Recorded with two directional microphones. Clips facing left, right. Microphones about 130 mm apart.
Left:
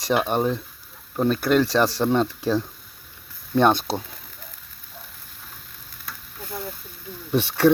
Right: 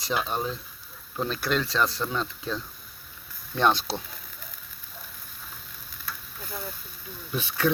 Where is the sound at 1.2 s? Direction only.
50° left (ahead or behind).